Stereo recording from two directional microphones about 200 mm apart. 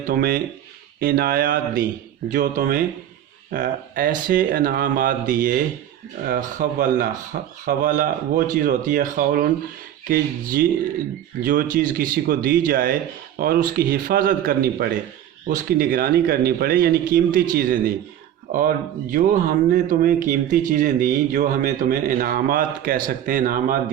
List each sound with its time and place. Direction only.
0.0 s speech: 45° right (ahead or behind)
19.1 s speech: 40° right (ahead or behind)